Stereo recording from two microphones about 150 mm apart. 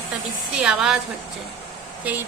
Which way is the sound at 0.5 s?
5° right (ahead or behind).